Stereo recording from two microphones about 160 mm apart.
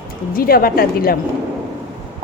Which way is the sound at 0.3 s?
65° left (ahead or behind).